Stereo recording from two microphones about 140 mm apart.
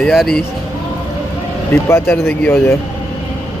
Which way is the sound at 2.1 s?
15° left (ahead or behind).